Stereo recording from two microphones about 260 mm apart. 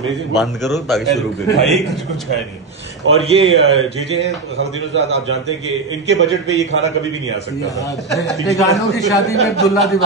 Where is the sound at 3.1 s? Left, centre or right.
Right.